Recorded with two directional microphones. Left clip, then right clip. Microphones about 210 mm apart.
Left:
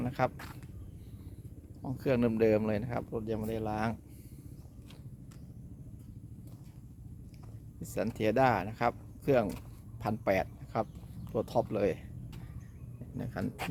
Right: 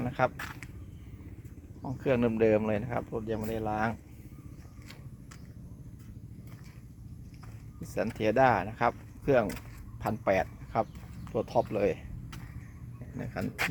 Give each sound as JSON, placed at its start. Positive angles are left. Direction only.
{"t": 0.0, "sound": "speech", "side_deg": 5}
{"t": 1.8, "sound": "speech", "side_deg": 0}
{"t": 7.8, "sound": "speech", "side_deg": 5}
{"t": 13.1, "sound": "speech", "side_deg": 5}